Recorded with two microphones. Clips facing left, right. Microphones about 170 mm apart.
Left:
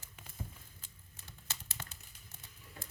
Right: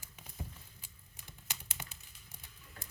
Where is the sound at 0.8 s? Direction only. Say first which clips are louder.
Even; 15° right (ahead or behind).